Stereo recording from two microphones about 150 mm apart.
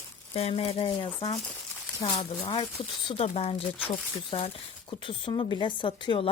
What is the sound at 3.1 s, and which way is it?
Speech, 40° left (ahead or behind).